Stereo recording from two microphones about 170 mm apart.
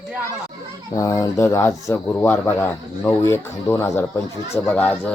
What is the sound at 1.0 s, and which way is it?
Speech, 20° left (ahead or behind).